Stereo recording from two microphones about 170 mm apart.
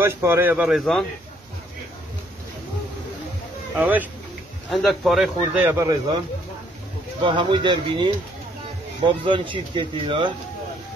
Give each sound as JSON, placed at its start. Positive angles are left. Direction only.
{"t": 0.0, "sound": "speech", "side_deg": -15}
{"t": 3.7, "sound": "speech", "side_deg": -10}
{"t": 5.6, "sound": "speech", "side_deg": -15}
{"t": 7.2, "sound": "speech", "side_deg": -30}